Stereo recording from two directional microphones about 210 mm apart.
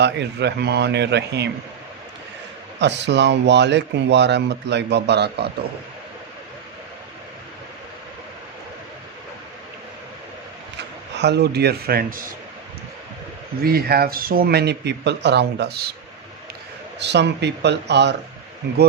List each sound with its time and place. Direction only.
0.0 s speech: 55° right (ahead or behind)
2.7 s speech: 55° right (ahead or behind)
11.1 s speech: 55° right (ahead or behind)
13.6 s speech: 45° right (ahead or behind)
17.0 s speech: 55° right (ahead or behind)